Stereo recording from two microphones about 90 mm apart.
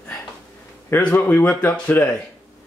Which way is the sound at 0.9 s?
20° left (ahead or behind).